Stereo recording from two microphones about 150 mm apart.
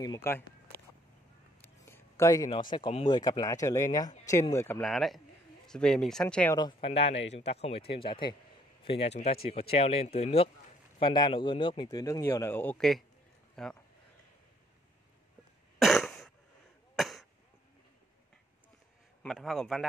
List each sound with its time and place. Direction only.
0.0 s speech: 20° left (ahead or behind)
1.6 s a sound: 15° left (ahead or behind)
2.7 s speech: 35° left (ahead or behind); by 4.8 s 15° left (ahead or behind)
4.8 s speech: centre (ahead or behind)
6.5 s speech: 30° left (ahead or behind)
8.8 s speech: 45° left (ahead or behind); by 13.7 s centre (ahead or behind)
15.8 s throat clearing: centre (ahead or behind)
16.9 s a sound: centre (ahead or behind)
19.2 s speech: centre (ahead or behind)